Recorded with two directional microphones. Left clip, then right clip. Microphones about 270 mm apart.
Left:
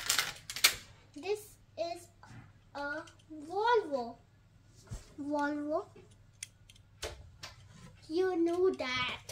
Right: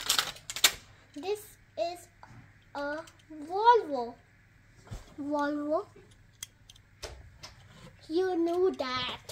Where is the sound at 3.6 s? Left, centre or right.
Centre.